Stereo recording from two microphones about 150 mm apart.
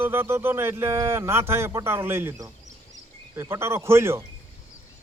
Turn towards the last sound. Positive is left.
turn(degrees=-15)  # may be behind; listen again after turning